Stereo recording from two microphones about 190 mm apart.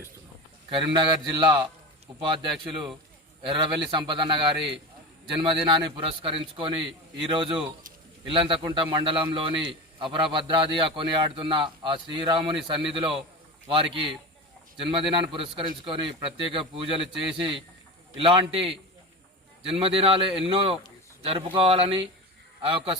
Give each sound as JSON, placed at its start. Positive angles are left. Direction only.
{"t": 0.7, "sound": "a man's voice", "side_deg": -25}
{"t": 3.9, "sound": "a man's voice", "side_deg": -25}
{"t": 18.2, "sound": "a man's voice", "side_deg": -30}